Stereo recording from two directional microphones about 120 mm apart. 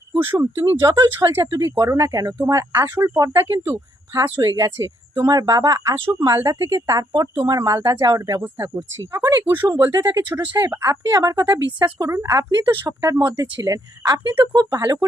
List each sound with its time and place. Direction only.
0.1 s speech: 15° right (ahead or behind)
9.8 s speech: 20° right (ahead or behind)
10.1 s speech: 35° right (ahead or behind)
10.6 s speech: 25° right (ahead or behind)